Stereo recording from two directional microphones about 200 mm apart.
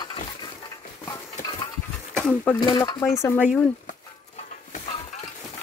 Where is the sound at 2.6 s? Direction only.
20° left (ahead or behind).